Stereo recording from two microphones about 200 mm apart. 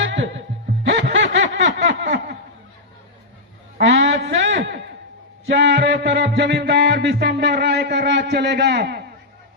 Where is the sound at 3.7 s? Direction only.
60° right (ahead or behind).